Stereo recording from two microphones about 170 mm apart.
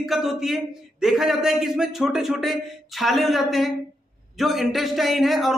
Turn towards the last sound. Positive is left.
turn(degrees=0)  # may be behind; listen again after turning